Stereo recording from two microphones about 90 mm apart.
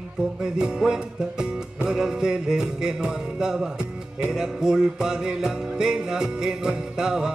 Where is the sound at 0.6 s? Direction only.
10° right (ahead or behind).